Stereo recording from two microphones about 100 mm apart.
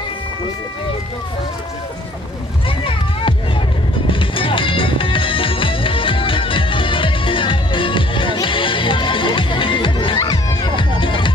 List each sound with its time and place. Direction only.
2.8 s music: 60° left (ahead or behind)